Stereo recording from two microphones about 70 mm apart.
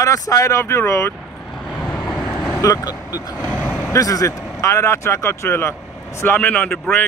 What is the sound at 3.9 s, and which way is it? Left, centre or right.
Speech, left.